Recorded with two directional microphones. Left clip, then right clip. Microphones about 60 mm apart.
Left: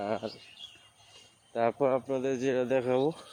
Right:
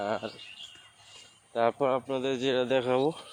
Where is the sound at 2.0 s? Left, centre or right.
Left.